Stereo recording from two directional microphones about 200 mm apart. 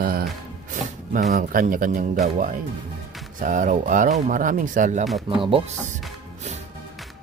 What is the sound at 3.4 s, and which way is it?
Speech, 40° right (ahead or behind).